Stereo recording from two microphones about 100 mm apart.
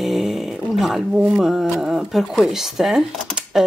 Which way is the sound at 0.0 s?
Centre (ahead or behind).